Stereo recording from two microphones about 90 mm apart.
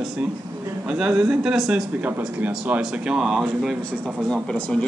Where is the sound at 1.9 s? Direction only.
20° right (ahead or behind).